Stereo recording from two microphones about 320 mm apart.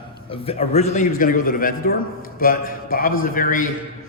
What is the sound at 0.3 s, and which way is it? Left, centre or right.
A man's voice, centre.